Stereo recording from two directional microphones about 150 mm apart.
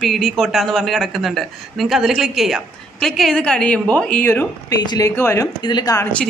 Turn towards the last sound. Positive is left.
turn(degrees=25)  # may be behind; listen again after turning